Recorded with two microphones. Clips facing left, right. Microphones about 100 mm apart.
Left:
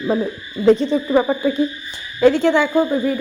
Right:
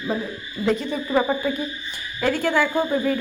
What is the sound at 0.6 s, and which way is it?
Speech, 25° left (ahead or behind).